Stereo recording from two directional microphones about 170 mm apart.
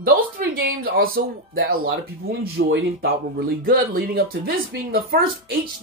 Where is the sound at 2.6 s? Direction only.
75° right (ahead or behind).